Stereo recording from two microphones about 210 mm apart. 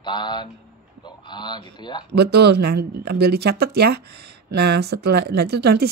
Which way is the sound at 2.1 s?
50° right (ahead or behind).